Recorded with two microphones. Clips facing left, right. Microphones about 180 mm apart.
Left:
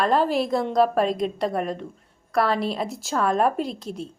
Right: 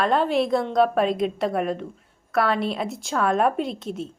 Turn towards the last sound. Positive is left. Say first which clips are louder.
# right 1 dB
turn(degrees=0)  # may be behind; listen again after turning